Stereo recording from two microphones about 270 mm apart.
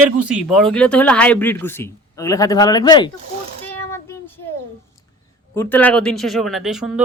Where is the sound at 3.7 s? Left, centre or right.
Centre.